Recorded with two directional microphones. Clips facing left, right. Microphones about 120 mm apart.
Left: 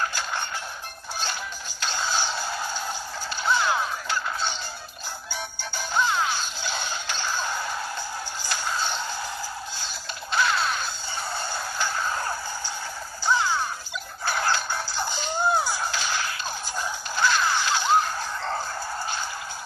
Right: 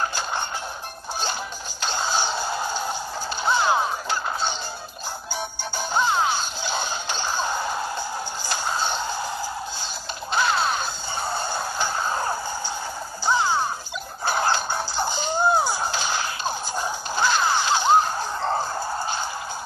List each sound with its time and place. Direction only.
0.0 s music: 25° right (ahead or behind)
1.8 s music: 25° right (ahead or behind)
5.6 s music: 25° right (ahead or behind)
10.3 s whip: 25° right (ahead or behind)
11.8 s music: 25° right (ahead or behind)